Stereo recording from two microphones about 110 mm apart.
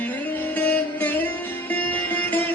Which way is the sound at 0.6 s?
15° left (ahead or behind).